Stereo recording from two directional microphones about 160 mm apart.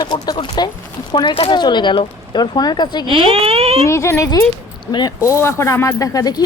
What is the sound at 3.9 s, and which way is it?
Speech, 15° left (ahead or behind).